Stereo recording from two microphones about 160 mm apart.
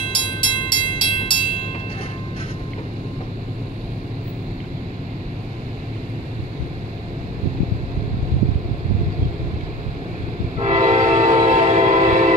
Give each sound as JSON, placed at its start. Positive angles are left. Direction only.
{"t": 0.1, "sound": "train", "side_deg": 30}
{"t": 10.6, "sound": "train", "side_deg": -45}